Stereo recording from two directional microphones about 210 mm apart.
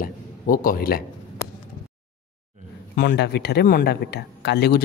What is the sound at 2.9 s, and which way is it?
A man's voice, 50° left (ahead or behind).